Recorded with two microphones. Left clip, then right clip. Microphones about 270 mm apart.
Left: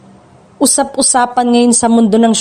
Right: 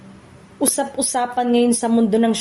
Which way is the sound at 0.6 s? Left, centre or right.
Left.